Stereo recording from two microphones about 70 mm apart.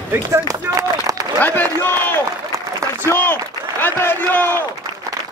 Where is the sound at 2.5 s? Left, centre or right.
Right.